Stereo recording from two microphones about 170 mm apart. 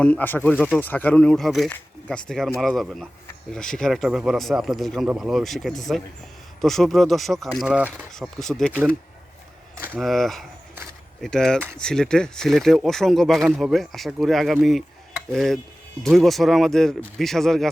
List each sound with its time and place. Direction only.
0.0 s speech: 10° left (ahead or behind); by 8.0 s 10° right (ahead or behind)
8.1 s speech: centre (ahead or behind)
10.0 s speech: centre (ahead or behind)